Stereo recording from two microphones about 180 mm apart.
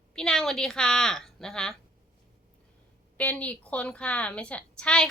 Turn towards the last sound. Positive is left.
turn(degrees=5)  # may be behind; listen again after turning